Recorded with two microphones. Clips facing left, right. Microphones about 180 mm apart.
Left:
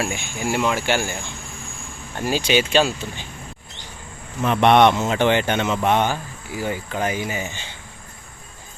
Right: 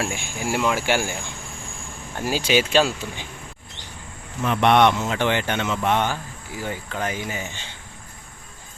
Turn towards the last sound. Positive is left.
turn(degrees=10)  # may be behind; listen again after turning